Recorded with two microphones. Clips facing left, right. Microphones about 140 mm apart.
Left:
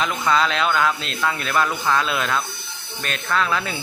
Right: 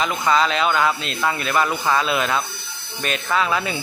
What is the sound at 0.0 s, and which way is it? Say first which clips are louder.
Speech: right 1 dB; centre (ahead or behind).